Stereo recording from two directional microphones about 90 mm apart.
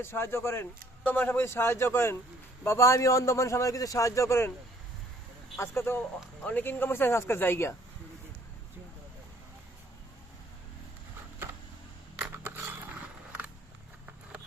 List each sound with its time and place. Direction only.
0.0 s a man's voice: 25° left (ahead or behind)
5.5 s speech: 25° left (ahead or behind)
12.4 s mechanisms: 25° right (ahead or behind)